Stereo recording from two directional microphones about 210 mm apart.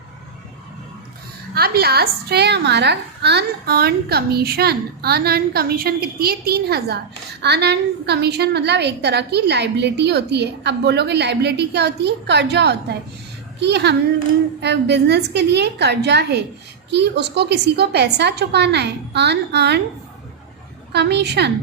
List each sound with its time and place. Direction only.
1.5 s a woman's voice: 50° right (ahead or behind)
20.9 s a woman's voice: 55° right (ahead or behind)